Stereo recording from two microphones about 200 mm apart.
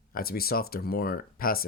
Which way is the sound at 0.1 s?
50° left (ahead or behind).